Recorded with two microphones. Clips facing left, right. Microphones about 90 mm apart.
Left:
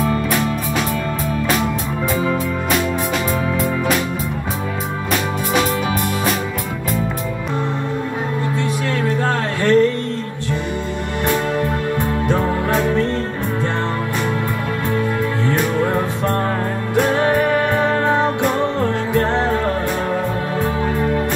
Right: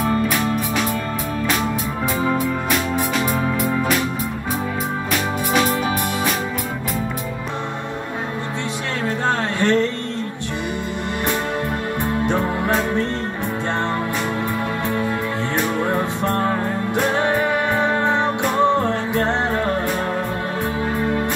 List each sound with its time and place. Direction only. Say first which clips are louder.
9.6 s music: left 5 dB; 20° right (ahead or behind)
17.2 s music: left 3 dB; 20° right (ahead or behind)